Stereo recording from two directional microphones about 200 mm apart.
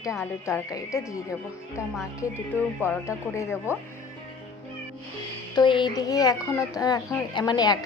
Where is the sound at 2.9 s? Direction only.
15° left (ahead or behind).